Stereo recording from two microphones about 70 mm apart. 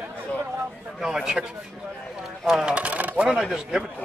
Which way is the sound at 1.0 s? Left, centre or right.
Centre.